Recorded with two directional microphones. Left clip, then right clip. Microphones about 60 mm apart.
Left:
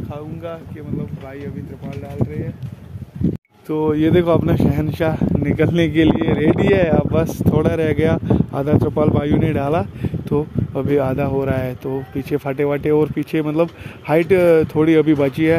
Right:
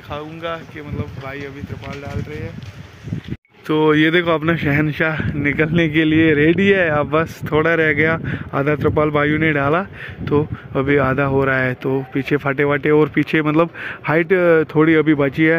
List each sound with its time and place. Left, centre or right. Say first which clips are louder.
0.1 s speech: right 6 dB; centre
3.6 s speech: right 3 dB; centre
4.5 s speech: right 2 dB; centre
4.8 s speech: right 1 dB; left
5.4 s speech: right 2 dB; centre
14.2 s speech: left 1 dB; left